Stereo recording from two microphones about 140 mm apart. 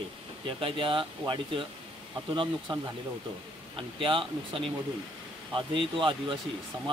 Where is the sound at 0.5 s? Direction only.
40° right (ahead or behind).